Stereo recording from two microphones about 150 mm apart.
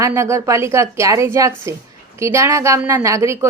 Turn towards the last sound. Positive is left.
turn(degrees=-20)  # may be behind; listen again after turning